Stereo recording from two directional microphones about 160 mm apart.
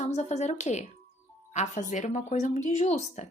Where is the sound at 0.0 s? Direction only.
45° left (ahead or behind).